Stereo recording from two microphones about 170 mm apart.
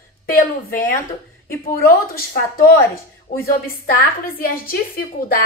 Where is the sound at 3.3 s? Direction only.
50° left (ahead or behind).